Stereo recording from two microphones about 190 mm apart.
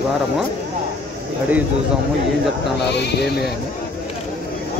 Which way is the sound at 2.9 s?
65° left (ahead or behind).